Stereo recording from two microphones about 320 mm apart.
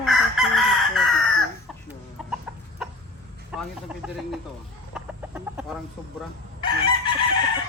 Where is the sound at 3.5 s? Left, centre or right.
Centre.